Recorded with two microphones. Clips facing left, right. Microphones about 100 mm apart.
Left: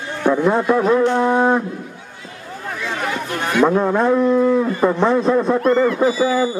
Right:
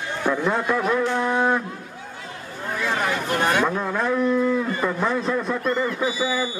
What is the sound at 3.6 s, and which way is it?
A man's voice, 30° left (ahead or behind).